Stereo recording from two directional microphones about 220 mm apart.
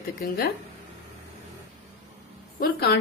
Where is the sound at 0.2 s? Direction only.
45° left (ahead or behind).